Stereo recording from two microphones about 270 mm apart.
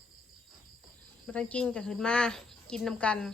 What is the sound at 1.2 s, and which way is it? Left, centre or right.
Speech, centre.